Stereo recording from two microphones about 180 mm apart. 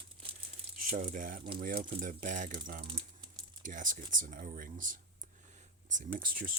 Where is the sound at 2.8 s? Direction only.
30° right (ahead or behind).